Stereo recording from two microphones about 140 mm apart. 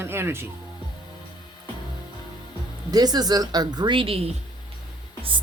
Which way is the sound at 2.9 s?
30° right (ahead or behind).